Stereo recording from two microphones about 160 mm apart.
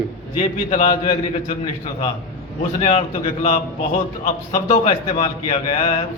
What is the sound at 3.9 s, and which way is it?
Speech, 60° left (ahead or behind).